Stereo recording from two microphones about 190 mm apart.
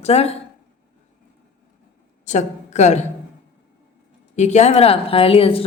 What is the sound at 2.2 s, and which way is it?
Speech, 40° left (ahead or behind).